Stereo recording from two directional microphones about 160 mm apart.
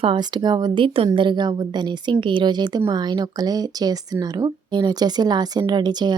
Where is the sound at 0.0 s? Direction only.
30° right (ahead or behind).